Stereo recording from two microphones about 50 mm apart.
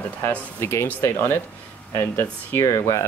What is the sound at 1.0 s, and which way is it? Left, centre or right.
Speech, left.